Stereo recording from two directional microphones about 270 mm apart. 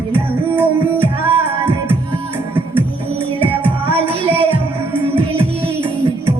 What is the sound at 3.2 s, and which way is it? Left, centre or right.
Music, centre.